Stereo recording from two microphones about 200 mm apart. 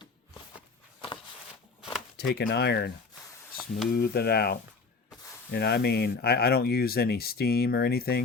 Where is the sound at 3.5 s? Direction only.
50° left (ahead or behind).